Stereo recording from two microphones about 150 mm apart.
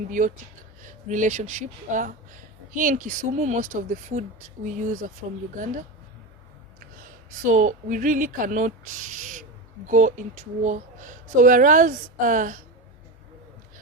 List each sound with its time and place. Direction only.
0.8 s speech: 55° right (ahead or behind)
7.3 s speech: 60° right (ahead or behind)